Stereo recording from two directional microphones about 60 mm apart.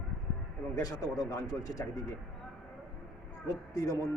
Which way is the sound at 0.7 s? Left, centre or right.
Left.